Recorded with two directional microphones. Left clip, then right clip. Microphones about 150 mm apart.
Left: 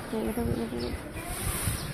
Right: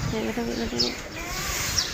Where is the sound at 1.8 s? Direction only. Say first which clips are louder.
Right 13 dB; 80° left.